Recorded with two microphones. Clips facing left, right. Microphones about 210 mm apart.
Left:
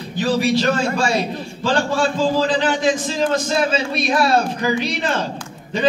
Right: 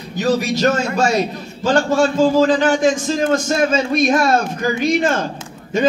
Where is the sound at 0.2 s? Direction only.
45° right (ahead or behind).